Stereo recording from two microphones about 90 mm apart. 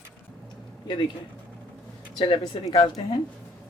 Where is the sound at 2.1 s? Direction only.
55° left (ahead or behind).